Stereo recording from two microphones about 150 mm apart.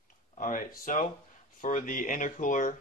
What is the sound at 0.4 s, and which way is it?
Speech, 60° left (ahead or behind).